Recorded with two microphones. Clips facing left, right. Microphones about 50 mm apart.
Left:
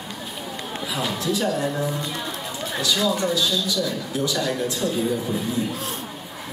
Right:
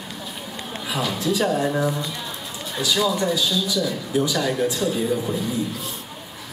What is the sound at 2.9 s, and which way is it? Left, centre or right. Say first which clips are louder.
A man's voice: right 2 dB; centre.